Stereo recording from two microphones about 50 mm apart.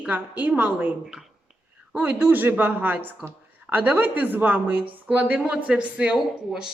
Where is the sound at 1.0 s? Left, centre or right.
Centre.